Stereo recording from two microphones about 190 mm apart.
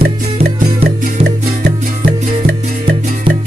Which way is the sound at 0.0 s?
55° right (ahead or behind).